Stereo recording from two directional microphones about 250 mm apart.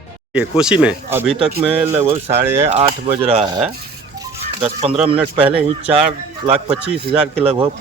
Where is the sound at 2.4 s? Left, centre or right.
Centre.